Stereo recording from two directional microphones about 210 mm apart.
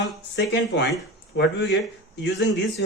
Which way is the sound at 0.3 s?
55° left (ahead or behind).